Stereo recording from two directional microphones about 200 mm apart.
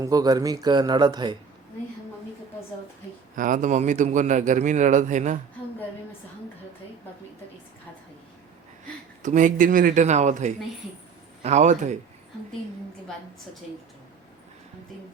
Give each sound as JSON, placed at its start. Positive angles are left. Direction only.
{"t": 0.0, "sound": "speech", "side_deg": -20}
{"t": 3.3, "sound": "a man's voice", "side_deg": -40}
{"t": 9.2, "sound": "a man's voice", "side_deg": -40}